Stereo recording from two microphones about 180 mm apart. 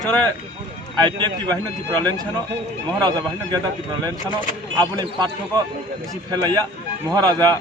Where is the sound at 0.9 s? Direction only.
25° right (ahead or behind).